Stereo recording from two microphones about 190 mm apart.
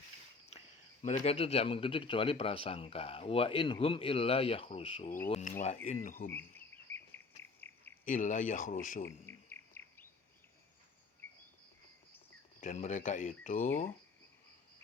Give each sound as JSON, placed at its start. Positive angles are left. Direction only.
{"t": 1.0, "sound": "speech", "side_deg": 35}
{"t": 6.3, "sound": "insect", "side_deg": 10}
{"t": 7.6, "sound": "cricket", "side_deg": 10}
{"t": 8.0, "sound": "speech", "side_deg": 40}
{"t": 9.0, "sound": "insect", "side_deg": 10}
{"t": 12.5, "sound": "speech", "side_deg": 40}